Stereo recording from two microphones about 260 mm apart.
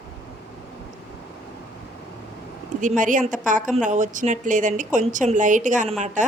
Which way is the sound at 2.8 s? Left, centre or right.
Right.